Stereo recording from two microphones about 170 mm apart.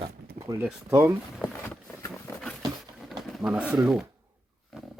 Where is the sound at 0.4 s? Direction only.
60° right (ahead or behind).